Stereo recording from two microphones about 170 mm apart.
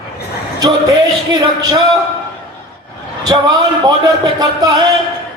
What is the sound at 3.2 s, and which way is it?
A man's voice, 20° right (ahead or behind).